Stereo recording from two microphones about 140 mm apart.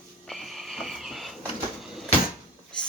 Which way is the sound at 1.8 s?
Centre (ahead or behind).